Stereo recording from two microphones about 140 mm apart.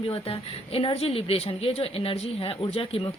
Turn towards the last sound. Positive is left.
turn(degrees=40)  # may be behind; listen again after turning